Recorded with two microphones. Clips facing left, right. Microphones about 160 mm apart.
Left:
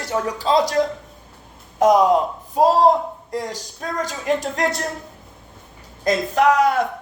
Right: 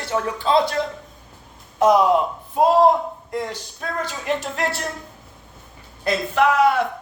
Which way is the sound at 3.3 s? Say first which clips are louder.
Even; 40° left (ahead or behind).